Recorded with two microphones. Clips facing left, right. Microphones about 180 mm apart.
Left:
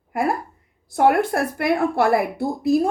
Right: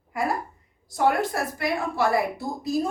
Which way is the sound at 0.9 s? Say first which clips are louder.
Left 5 dB; 60° left (ahead or behind).